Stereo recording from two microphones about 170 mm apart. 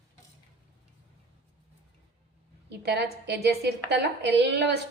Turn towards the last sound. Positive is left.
turn(degrees=-85)